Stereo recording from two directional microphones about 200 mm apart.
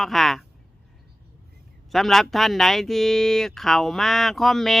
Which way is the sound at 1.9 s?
Centre (ahead or behind).